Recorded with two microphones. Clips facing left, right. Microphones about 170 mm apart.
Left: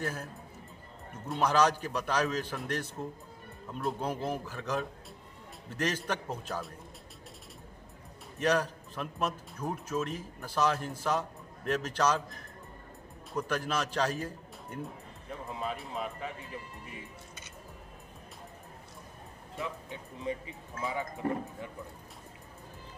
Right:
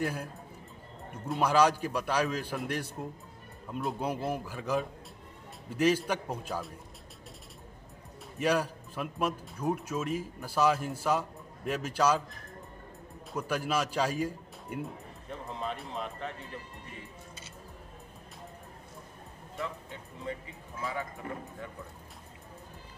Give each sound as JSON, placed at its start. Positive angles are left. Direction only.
{"t": 0.0, "sound": "a man's voice", "side_deg": -15}
{"t": 1.3, "sound": "a man's voice", "side_deg": -10}
{"t": 8.4, "sound": "a man's voice", "side_deg": -10}
{"t": 13.3, "sound": "a man's voice", "side_deg": -10}
{"t": 15.2, "sound": "speech", "side_deg": 5}
{"t": 19.6, "sound": "speech", "side_deg": 15}